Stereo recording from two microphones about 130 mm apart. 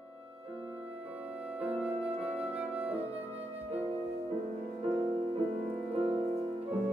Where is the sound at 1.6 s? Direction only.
10° right (ahead or behind).